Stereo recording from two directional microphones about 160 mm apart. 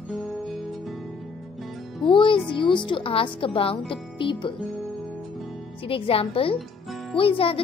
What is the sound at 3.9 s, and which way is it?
Speech, 30° left (ahead or behind).